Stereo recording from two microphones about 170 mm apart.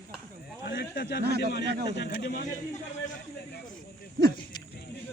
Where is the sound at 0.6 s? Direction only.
75° left (ahead or behind).